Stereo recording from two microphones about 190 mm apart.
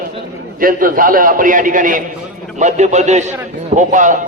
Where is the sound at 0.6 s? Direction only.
45° right (ahead or behind).